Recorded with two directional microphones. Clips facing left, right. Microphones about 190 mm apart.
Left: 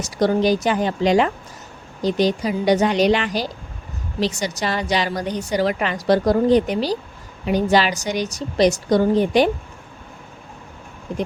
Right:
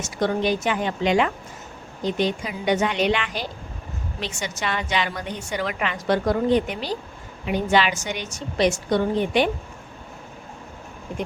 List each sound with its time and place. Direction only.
0.0 s a woman's voice: 35° left (ahead or behind)